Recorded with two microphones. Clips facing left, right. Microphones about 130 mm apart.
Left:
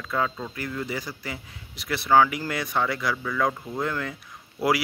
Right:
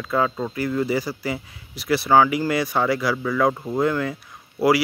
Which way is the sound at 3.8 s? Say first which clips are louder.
Right 7 dB; 10° right (ahead or behind).